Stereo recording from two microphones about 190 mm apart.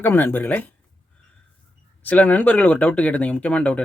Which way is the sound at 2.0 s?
5° left (ahead or behind).